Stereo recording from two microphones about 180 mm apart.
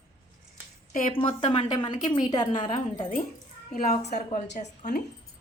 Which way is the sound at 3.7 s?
40° left (ahead or behind).